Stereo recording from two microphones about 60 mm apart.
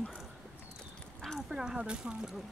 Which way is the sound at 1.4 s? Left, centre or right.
Centre.